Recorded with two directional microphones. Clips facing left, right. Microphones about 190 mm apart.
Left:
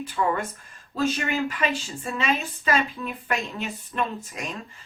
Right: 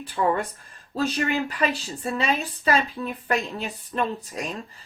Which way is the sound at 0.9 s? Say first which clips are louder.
Right 1 dB; 35° right (ahead or behind).